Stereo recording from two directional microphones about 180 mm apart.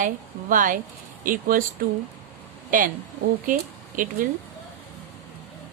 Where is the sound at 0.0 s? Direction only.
45° right (ahead or behind).